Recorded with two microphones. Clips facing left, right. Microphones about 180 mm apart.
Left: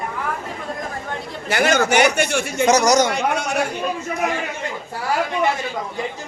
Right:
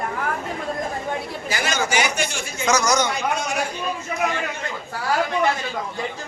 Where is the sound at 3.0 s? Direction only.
70° left (ahead or behind).